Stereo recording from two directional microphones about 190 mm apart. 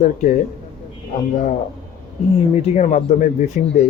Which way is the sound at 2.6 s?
35° left (ahead or behind).